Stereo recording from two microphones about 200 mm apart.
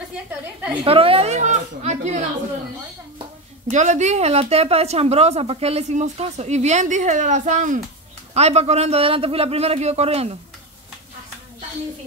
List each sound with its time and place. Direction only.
0.8 s a woman's voice: 30° right (ahead or behind)
3.7 s a woman's voice: 35° right (ahead or behind)